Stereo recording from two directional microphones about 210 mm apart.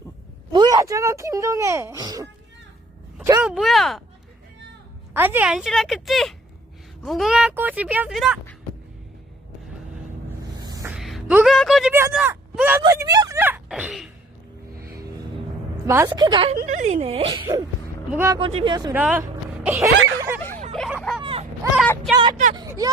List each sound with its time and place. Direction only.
0.5 s speech: 20° right (ahead or behind)
3.4 s speech: centre (ahead or behind)
5.1 s speech: 10° right (ahead or behind)
10.6 s a sound: 20° right (ahead or behind)
10.8 s a sound: centre (ahead or behind)
11.9 s speech: 10° right (ahead or behind)
14.8 s music: 45° right (ahead or behind)
16.0 s speech: 20° right (ahead or behind)
18.3 s speech: 25° right (ahead or behind)
18.9 s speech: 5° right (ahead or behind)
20.7 s a sound: centre (ahead or behind)
21.2 s a sound: 25° right (ahead or behind)
21.8 s a woman's voice: centre (ahead or behind)
22.5 s speech: 20° right (ahead or behind)